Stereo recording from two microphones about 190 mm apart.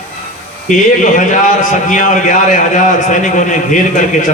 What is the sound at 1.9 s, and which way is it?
A man's voice, 40° left (ahead or behind).